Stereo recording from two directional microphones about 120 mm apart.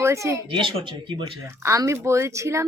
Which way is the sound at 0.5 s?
45° right (ahead or behind).